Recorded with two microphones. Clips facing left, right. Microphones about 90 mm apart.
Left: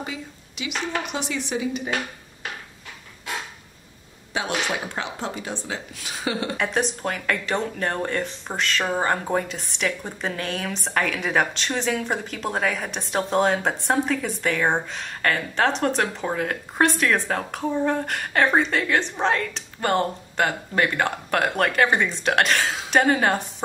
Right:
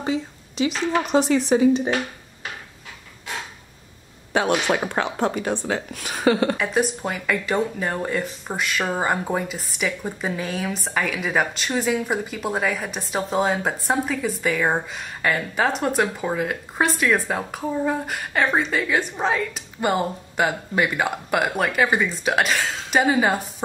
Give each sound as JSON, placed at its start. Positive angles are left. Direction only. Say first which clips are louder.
{"t": 0.0, "sound": "a woman's voice", "louder": "right 8 dB", "side_deg": -35}
{"t": 4.3, "sound": "speech", "louder": "right 6 dB", "side_deg": -55}
{"t": 6.5, "sound": "speech", "louder": "right 2 dB", "side_deg": 0}